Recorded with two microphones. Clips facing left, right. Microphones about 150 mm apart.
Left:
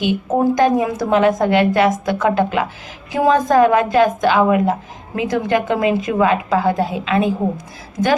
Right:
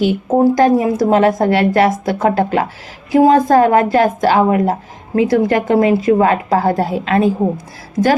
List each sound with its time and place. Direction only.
0.1 s a woman's voice: 35° right (ahead or behind)